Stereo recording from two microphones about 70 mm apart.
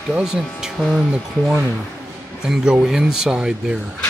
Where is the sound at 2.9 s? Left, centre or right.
Centre.